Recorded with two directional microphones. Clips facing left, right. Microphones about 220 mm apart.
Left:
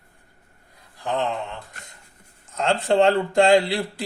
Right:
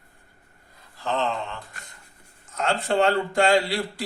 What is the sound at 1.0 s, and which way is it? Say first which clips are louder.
Speech: left 1 dB; 15° left (ahead or behind).